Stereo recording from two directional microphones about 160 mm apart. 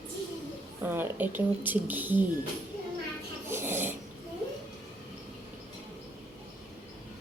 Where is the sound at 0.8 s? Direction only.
15° right (ahead or behind).